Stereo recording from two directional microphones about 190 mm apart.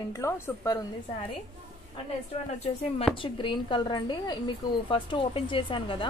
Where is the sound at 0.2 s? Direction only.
15° left (ahead or behind).